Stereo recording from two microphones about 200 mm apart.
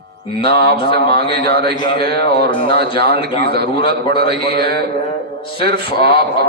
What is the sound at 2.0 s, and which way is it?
Mantra, 55° right (ahead or behind).